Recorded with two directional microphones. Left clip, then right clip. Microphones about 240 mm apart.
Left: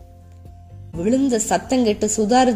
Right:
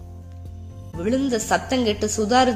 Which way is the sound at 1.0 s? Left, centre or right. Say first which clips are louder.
Left 3 dB; centre.